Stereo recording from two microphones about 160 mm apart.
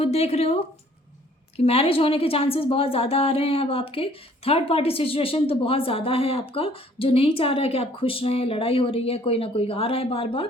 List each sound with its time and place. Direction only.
0.0 s a woman's voice: 40° left (ahead or behind)